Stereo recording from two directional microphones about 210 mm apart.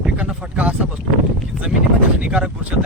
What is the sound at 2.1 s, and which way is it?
Speech, 5° right (ahead or behind).